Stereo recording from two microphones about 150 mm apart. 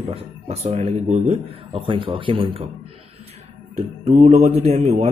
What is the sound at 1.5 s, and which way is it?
A man's voice, 40° right (ahead or behind).